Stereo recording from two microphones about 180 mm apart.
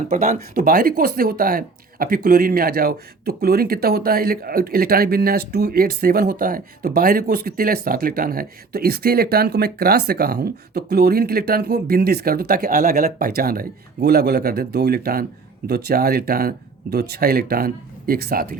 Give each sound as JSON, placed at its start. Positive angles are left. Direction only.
{"t": 0.1, "sound": "speech", "side_deg": -40}
{"t": 0.3, "sound": "speech", "side_deg": -55}